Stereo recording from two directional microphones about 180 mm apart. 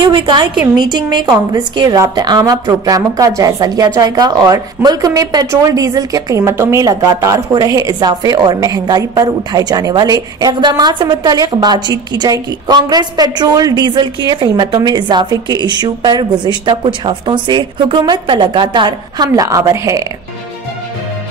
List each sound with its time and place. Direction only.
0.0 s a woman's voice: 25° right (ahead or behind)